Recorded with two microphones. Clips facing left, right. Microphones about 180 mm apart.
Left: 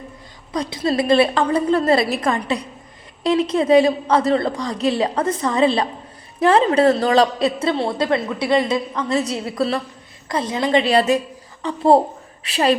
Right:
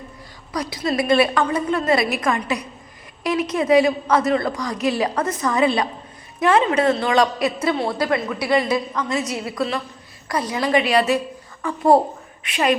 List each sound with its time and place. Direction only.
0.5 s a woman's voice: 25° left (ahead or behind)